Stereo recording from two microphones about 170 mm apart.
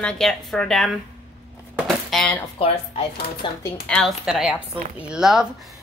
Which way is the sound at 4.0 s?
5° right (ahead or behind).